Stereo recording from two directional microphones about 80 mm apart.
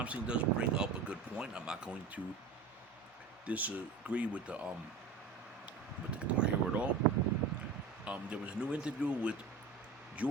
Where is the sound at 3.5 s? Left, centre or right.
Right.